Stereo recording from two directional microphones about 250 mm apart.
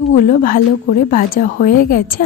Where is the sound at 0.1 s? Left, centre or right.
Left.